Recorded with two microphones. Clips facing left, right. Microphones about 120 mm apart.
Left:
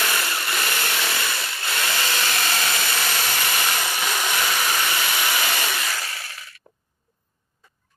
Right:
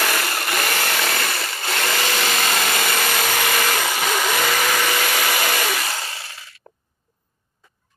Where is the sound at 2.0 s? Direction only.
85° right; by 5.8 s 60° right (ahead or behind).